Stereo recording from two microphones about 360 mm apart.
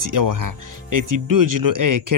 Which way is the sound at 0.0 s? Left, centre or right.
Right.